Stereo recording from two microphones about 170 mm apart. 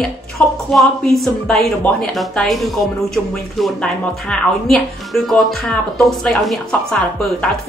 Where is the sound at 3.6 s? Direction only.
5° left (ahead or behind).